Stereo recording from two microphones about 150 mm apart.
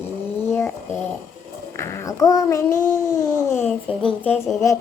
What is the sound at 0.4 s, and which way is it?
Bird, 15° left (ahead or behind).